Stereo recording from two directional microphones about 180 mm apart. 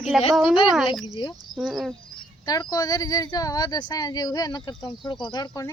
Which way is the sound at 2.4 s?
20° left (ahead or behind).